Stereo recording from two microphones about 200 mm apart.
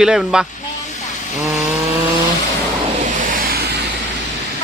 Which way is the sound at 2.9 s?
40° right (ahead or behind).